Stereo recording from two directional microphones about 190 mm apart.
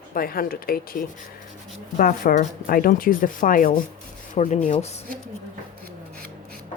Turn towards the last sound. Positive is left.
turn(degrees=35)  # may be behind; listen again after turning